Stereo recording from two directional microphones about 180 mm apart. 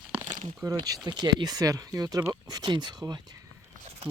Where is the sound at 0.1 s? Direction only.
20° right (ahead or behind).